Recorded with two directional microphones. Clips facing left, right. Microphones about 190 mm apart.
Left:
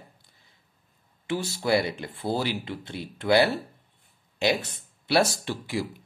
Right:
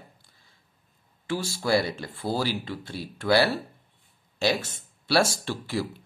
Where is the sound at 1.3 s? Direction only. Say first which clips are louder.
Even; 20° left (ahead or behind).